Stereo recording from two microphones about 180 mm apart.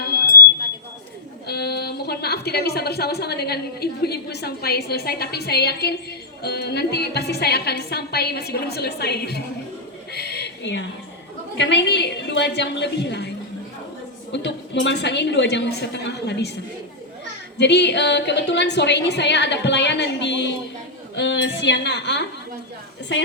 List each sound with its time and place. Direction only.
1.5 s a woman's voice: 65° left (ahead or behind)
10.1 s a sound: 65° left (ahead or behind)
11.5 s a woman's voice: 75° left (ahead or behind)
14.3 s a woman's voice: 75° left (ahead or behind)
17.6 s a woman's voice: 70° left (ahead or behind)
21.2 s a woman's voice: 90° left